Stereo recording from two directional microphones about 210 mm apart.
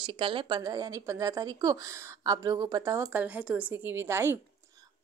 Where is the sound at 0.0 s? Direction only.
25° right (ahead or behind).